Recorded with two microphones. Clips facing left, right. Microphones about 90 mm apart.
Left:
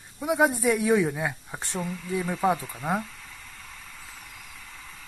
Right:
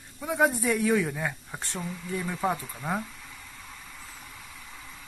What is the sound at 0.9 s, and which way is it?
Speech, 15° left (ahead or behind).